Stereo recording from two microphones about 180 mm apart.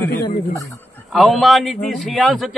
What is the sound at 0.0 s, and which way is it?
Speech, 15° left (ahead or behind).